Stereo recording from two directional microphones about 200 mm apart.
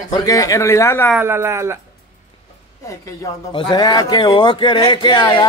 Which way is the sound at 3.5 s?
20° left (ahead or behind).